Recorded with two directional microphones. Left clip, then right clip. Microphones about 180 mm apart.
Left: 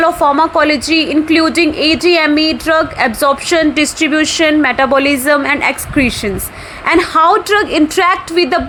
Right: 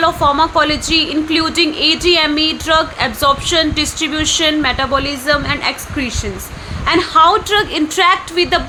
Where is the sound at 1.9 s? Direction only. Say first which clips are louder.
Left 2 dB; 30° left (ahead or behind).